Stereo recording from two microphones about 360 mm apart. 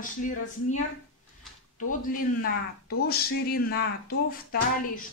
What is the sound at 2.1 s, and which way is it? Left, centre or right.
Speech, left.